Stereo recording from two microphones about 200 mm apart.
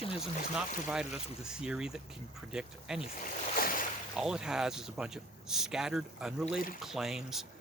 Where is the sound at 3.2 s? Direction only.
40° left (ahead or behind).